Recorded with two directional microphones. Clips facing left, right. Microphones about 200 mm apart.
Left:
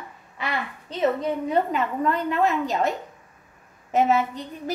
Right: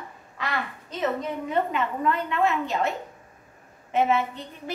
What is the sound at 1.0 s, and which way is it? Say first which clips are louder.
A woman's voice: left 4 dB; 40° left (ahead or behind).